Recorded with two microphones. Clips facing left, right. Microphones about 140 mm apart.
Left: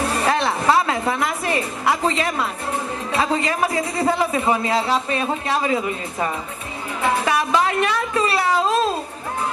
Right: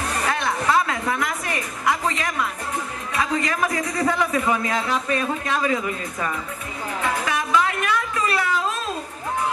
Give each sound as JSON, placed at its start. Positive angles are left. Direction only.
{"t": 0.0, "sound": "a sound", "side_deg": 30}
{"t": 3.1, "sound": "a man's voice", "side_deg": 30}
{"t": 7.0, "sound": "music", "side_deg": 30}